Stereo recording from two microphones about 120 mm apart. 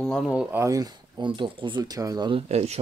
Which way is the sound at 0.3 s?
10° right (ahead or behind).